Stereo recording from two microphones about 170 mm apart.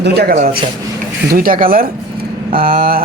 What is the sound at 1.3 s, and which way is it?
Speech, 60° right (ahead or behind).